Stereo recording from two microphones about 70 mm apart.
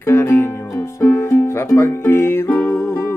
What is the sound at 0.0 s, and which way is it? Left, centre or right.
Music, left.